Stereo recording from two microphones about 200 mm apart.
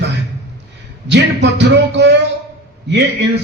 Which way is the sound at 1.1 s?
60° right (ahead or behind).